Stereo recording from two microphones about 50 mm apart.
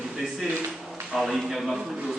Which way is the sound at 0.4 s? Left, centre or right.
Right.